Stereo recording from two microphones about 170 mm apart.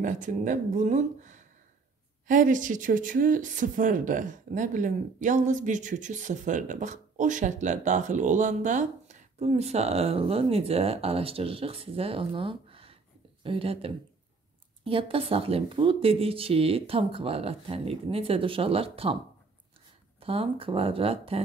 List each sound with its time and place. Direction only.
0.0 s speech: 50° right (ahead or behind)
20.2 s speech: 35° right (ahead or behind)